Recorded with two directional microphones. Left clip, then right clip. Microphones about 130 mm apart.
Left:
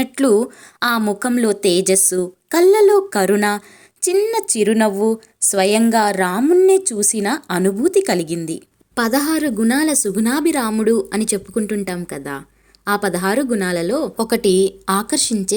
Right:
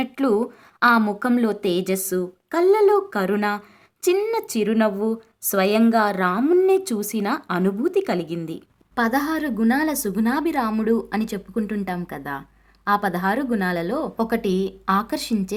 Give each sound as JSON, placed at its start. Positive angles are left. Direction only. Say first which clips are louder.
{"t": 0.0, "sound": "a woman's voice", "louder": "left 6 dB", "side_deg": 30}
{"t": 6.4, "sound": "a woman's voice", "louder": "left 6 dB", "side_deg": 10}